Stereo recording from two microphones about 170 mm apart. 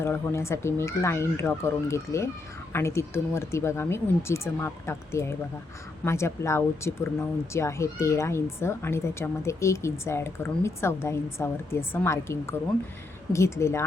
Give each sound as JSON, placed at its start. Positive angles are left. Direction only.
{"t": 0.0, "sound": "speech", "side_deg": 15}